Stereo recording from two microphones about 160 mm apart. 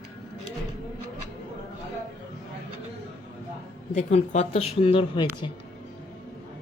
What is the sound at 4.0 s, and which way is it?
Speech, 45° left (ahead or behind).